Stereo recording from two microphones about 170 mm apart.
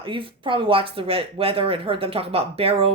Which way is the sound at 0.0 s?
30° right (ahead or behind).